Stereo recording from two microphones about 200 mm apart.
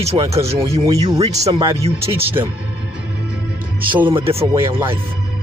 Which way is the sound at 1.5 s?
20° right (ahead or behind).